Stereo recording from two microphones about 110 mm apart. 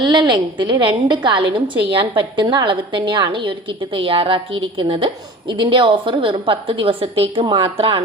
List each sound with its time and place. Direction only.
0.0 s a woman's voice: 45° right (ahead or behind)
7.4 s a woman's voice: 45° right (ahead or behind)
7.8 s speech: 55° right (ahead or behind)